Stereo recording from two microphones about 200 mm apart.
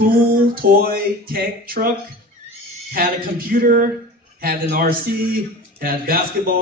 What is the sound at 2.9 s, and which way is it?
Speech, 45° right (ahead or behind).